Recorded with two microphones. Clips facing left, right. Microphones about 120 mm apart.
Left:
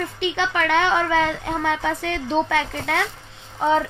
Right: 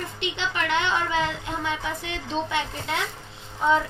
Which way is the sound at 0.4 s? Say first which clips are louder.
Left 6 dB; 60° left (ahead or behind).